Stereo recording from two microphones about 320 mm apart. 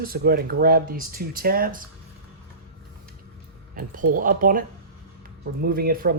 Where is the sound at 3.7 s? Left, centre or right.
Right.